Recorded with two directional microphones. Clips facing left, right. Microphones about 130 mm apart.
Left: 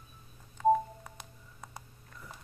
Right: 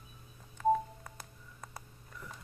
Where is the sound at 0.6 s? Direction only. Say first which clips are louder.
Left 3 dB; 5° left (ahead or behind).